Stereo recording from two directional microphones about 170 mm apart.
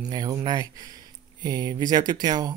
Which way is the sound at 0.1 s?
20° right (ahead or behind).